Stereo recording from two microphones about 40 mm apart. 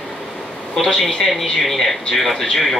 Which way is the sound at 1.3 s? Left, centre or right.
Centre.